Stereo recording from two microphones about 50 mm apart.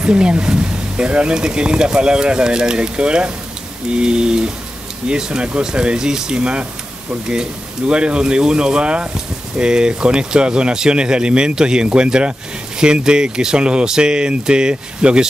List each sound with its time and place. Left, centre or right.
0.0 s speech: centre
7.9 s speech: right